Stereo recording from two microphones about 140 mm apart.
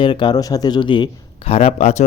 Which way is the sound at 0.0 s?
35° left (ahead or behind).